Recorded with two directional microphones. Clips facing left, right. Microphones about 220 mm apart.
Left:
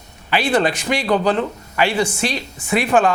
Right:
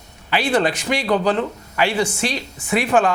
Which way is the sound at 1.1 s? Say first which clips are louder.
Left 1 dB; 20° left (ahead or behind).